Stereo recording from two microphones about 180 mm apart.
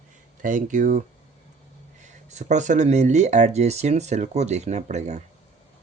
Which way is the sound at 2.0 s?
40° right (ahead or behind).